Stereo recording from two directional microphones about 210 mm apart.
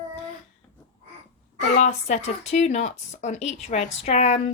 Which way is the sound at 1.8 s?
30° left (ahead or behind).